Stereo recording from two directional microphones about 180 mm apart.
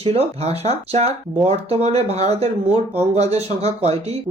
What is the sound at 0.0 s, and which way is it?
Speech, 35° right (ahead or behind).